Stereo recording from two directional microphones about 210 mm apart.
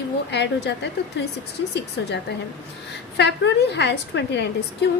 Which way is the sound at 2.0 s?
60° left (ahead or behind).